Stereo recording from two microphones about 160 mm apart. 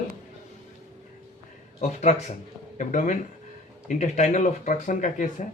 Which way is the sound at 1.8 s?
45° left (ahead or behind).